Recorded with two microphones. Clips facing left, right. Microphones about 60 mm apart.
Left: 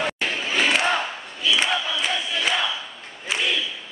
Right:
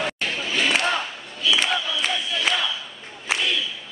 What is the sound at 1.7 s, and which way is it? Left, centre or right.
Crowd, centre.